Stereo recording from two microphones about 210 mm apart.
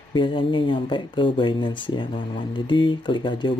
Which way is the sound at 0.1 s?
25° left (ahead or behind).